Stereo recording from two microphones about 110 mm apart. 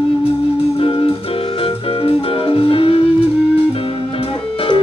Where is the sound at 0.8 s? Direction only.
60° left (ahead or behind).